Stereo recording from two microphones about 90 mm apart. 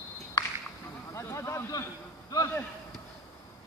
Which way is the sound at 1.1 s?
30° left (ahead or behind).